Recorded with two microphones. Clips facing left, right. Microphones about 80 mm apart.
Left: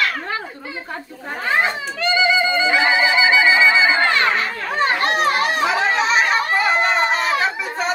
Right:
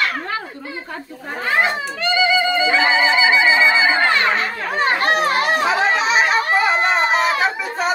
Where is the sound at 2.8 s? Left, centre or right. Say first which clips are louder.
Right 1 dB; right.